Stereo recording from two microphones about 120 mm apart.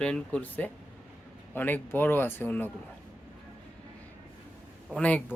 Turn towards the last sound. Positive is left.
turn(degrees=10)  # may be behind; listen again after turning